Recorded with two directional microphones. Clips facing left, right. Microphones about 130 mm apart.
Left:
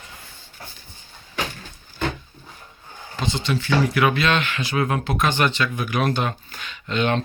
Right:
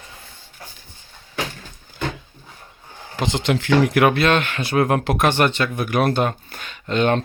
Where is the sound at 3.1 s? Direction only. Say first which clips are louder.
Right 4 dB; 80° right.